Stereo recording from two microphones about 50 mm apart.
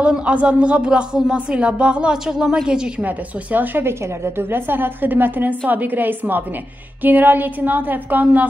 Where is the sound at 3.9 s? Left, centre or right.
Right.